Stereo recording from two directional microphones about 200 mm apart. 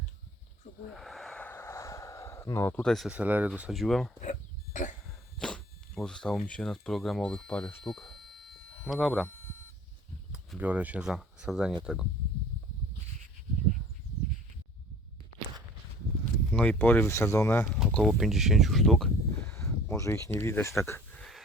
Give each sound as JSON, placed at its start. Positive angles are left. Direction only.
{"t": 0.9, "sound": "a sound", "side_deg": 0}
{"t": 4.2, "sound": "a sound", "side_deg": 40}
{"t": 5.4, "sound": "zipper", "side_deg": 5}
{"t": 6.5, "sound": "speech", "side_deg": 5}
{"t": 10.3, "sound": "speech", "side_deg": -5}
{"t": 16.5, "sound": "speech", "side_deg": 5}
{"t": 17.7, "sound": "speech", "side_deg": 0}